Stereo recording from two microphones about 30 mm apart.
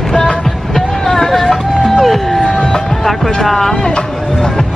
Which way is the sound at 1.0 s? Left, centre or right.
Centre.